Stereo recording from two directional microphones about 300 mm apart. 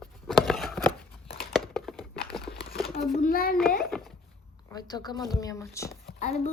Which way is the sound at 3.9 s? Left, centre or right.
Centre.